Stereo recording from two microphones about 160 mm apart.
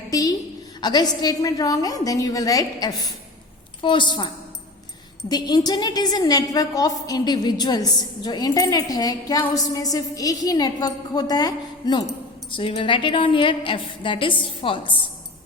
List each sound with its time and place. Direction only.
0.1 s a woman's voice: 20° left (ahead or behind)
5.3 s a woman's voice: 25° left (ahead or behind)